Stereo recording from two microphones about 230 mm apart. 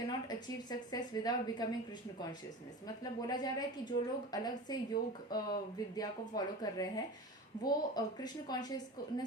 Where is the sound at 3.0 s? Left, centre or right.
Centre.